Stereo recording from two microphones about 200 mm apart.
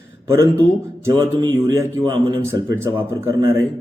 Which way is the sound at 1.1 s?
15° right (ahead or behind).